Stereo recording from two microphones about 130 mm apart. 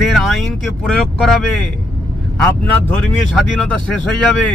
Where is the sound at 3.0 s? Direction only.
5° left (ahead or behind).